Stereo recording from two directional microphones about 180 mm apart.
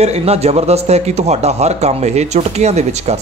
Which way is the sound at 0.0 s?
35° right (ahead or behind).